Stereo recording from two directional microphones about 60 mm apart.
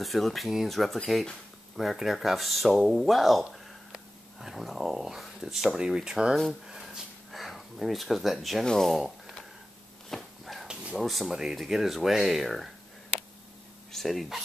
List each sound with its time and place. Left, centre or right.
0.0 s speech: centre
3.9 s a sound: centre
5.8 s speech: centre
6.7 s dog: centre
7.2 s gasp: centre
8.6 s speech: centre
10.0 s a sound: centre
10.7 s a sound: centre
11.0 s speech: centre
13.9 s speech: centre